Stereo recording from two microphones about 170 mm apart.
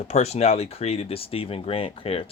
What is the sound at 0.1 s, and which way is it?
Speech, 40° left (ahead or behind).